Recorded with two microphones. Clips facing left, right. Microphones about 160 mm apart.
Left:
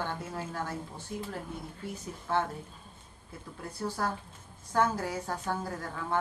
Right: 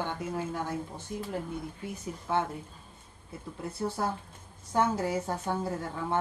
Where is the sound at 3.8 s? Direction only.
25° right (ahead or behind).